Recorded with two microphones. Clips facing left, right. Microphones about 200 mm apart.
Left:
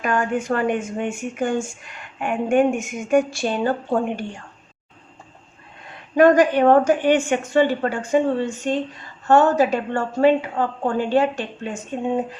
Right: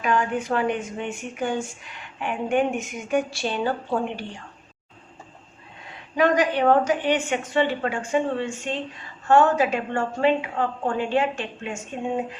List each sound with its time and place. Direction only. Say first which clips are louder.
0.0 s a woman's voice: left 2 dB; 45° left (ahead or behind)
6.1 s a woman's voice: left 6 dB; 50° left (ahead or behind)